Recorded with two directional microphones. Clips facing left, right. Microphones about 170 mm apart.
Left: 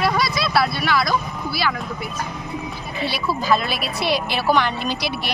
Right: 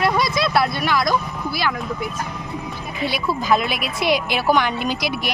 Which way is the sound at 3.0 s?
20° right (ahead or behind).